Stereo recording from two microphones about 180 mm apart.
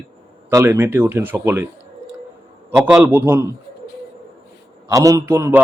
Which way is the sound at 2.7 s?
10° right (ahead or behind).